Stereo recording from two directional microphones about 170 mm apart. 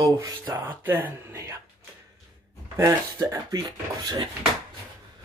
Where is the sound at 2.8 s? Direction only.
20° right (ahead or behind).